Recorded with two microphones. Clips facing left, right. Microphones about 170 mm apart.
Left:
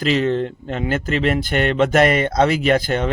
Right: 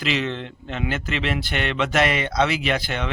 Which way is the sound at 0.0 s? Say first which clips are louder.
Left 7 dB; 45° left (ahead or behind).